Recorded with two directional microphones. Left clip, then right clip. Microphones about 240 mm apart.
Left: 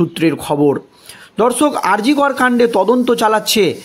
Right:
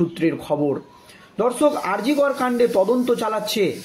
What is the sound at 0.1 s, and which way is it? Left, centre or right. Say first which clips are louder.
A man's voice: left 6 dB; left.